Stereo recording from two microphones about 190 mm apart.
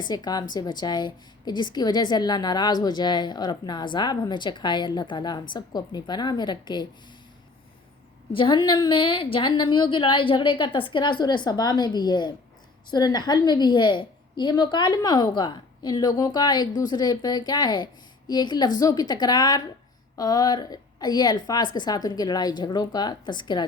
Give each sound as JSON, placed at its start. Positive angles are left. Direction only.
{"t": 0.1, "sound": "a woman's voice", "side_deg": 20}
{"t": 8.3, "sound": "a woman's voice", "side_deg": 25}